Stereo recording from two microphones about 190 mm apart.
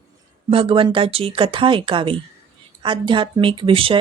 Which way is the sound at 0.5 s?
30° right (ahead or behind).